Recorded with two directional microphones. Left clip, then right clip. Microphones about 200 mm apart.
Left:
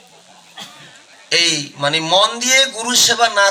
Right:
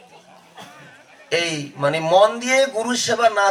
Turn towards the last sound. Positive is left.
turn(degrees=-40)  # may be behind; listen again after turning